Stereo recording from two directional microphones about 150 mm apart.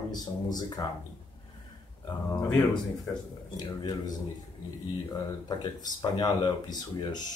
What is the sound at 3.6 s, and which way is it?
Speech, 25° left (ahead or behind).